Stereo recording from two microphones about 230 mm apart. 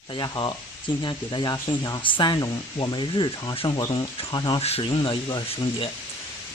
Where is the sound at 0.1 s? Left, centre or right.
Centre.